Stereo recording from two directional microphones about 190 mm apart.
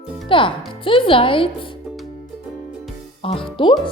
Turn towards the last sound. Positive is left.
turn(degrees=25)  # may be behind; listen again after turning